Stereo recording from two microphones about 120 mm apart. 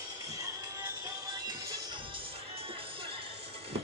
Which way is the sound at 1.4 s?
40° right (ahead or behind).